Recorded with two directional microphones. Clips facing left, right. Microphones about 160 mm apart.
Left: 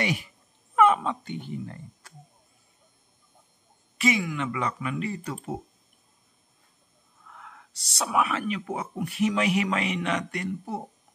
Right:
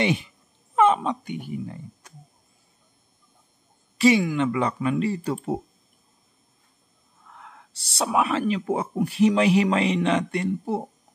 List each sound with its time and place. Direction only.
0.0 s speech: 25° right (ahead or behind)
4.0 s speech: 30° right (ahead or behind)
7.7 s speech: 30° right (ahead or behind)